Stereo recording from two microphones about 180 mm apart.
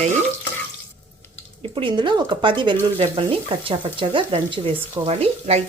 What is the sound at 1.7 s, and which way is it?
Speech, 25° right (ahead or behind).